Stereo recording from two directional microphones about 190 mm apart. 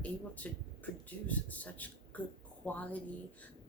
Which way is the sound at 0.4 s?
10° left (ahead or behind).